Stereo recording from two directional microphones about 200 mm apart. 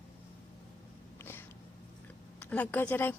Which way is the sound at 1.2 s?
10° left (ahead or behind).